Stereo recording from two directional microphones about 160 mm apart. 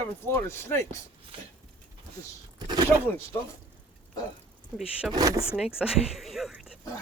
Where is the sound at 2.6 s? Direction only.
25° right (ahead or behind).